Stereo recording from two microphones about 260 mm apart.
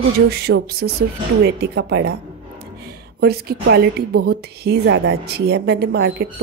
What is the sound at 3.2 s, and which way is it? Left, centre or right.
A woman's voice, right.